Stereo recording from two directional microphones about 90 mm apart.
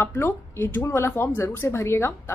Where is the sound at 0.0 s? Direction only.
25° left (ahead or behind).